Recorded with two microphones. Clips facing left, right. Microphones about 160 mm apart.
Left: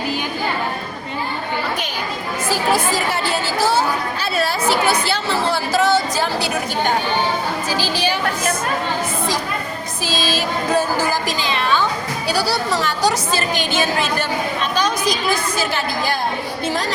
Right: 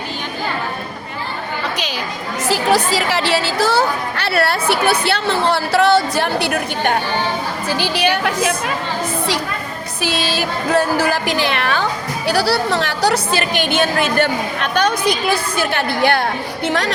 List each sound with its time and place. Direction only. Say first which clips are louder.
2.5 s a woman's voice: right 3 dB; 85° right; by 8.5 s 65° right (ahead or behind)
10.0 s a woman's voice: right 2 dB; 65° right (ahead or behind)